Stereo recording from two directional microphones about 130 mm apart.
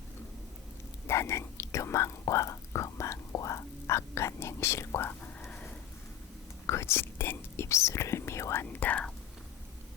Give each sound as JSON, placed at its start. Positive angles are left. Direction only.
{"t": 1.0, "sound": "whispering", "side_deg": 20}
{"t": 6.7, "sound": "speech", "side_deg": 20}